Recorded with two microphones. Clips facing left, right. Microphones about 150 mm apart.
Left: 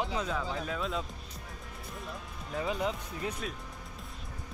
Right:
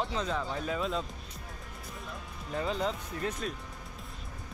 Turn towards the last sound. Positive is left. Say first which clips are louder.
# right 2 dB
turn(degrees=5)  # may be behind; listen again after turning